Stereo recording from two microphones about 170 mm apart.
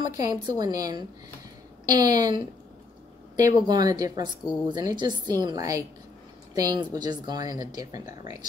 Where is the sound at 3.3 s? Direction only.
20° right (ahead or behind).